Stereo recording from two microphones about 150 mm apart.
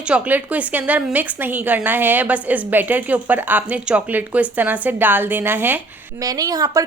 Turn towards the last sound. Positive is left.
turn(degrees=-25)  # may be behind; listen again after turning